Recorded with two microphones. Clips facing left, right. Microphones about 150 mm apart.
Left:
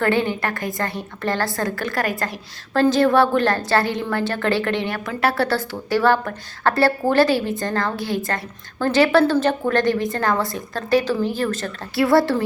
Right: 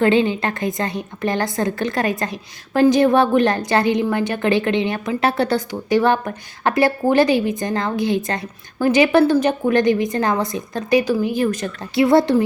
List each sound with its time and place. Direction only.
0.0 s a woman's voice: 20° right (ahead or behind)